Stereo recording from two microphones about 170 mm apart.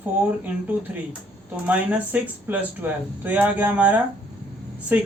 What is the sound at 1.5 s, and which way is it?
Speech, 10° right (ahead or behind).